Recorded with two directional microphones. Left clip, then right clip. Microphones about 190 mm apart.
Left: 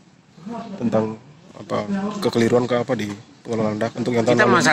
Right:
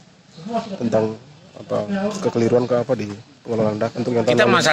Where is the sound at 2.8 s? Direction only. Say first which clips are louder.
Right 2 dB; 10° right (ahead or behind).